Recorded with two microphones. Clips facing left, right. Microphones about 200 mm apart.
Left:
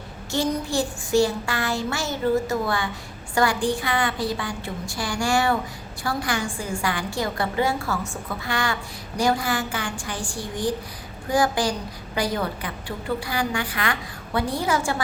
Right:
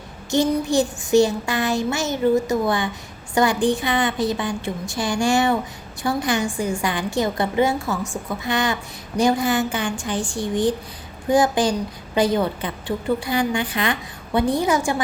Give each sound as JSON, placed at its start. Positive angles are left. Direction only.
{"t": 0.3, "sound": "a woman's voice", "side_deg": -20}